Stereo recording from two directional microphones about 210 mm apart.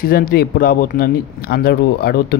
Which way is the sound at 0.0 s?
45° left (ahead or behind).